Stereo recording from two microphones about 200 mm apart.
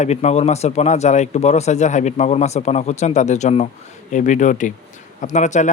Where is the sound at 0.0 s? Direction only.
35° left (ahead or behind).